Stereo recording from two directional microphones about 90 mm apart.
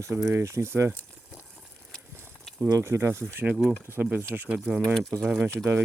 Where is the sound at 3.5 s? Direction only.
5° right (ahead or behind).